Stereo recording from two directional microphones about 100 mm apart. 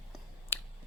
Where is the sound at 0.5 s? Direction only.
20° left (ahead or behind).